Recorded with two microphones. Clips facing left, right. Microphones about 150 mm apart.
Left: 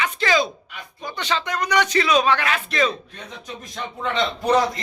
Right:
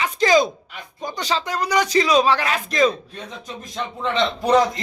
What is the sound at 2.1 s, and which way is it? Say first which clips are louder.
Speech: right 2 dB; 35° right (ahead or behind).